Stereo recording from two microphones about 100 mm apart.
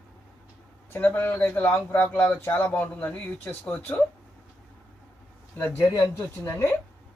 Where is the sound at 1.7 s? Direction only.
10° left (ahead or behind).